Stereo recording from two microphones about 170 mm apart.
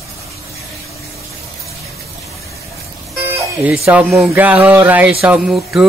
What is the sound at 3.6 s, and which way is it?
Mantra, 10° right (ahead or behind).